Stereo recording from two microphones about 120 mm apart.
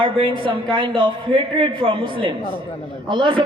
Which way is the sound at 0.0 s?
45° right (ahead or behind).